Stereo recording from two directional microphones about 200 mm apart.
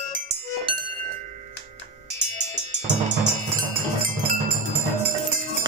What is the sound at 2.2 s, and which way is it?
Drum kit, 35° right (ahead or behind).